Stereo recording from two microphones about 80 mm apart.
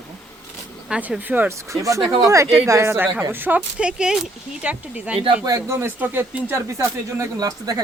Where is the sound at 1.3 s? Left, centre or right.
Right.